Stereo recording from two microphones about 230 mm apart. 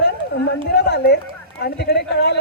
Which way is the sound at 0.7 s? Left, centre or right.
Left.